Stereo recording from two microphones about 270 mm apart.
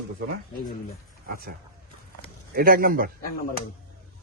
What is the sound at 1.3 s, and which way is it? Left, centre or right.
Speech, right.